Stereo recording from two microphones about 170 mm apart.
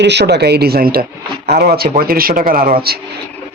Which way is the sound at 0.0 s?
90° right.